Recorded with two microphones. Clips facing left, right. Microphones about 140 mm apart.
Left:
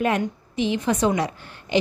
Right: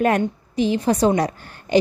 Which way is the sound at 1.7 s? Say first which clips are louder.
Right 5 dB; 45° right (ahead or behind).